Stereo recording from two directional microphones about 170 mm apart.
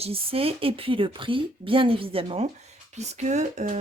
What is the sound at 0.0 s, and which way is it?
A woman's voice, 35° right (ahead or behind).